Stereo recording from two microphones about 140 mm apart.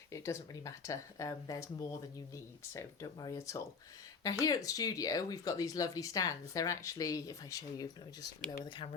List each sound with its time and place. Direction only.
0.1 s speech: 20° left (ahead or behind)